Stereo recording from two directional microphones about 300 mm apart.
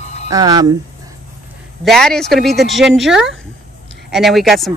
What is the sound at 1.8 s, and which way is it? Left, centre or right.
Speech, centre.